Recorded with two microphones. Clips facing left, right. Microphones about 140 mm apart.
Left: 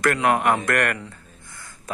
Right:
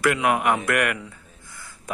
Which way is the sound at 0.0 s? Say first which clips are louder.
Left 1 dB; 10° right (ahead or behind).